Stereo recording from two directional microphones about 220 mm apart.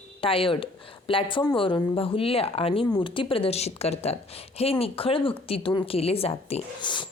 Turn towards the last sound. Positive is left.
turn(degrees=20)  # may be behind; listen again after turning